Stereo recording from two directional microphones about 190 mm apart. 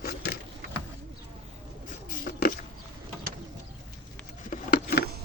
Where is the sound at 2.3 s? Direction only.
45° left (ahead or behind).